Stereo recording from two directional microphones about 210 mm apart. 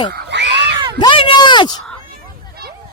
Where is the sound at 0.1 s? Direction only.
50° right (ahead or behind).